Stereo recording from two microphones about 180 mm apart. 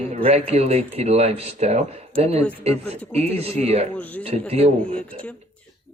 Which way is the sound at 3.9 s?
10° left (ahead or behind).